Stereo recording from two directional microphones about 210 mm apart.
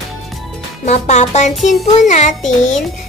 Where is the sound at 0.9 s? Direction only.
35° left (ahead or behind).